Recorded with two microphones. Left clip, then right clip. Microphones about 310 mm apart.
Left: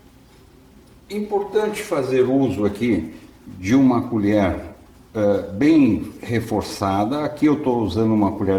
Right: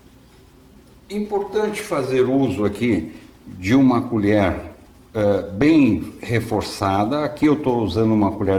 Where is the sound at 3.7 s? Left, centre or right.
Centre.